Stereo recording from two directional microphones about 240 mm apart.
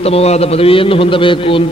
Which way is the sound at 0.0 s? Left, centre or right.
Left.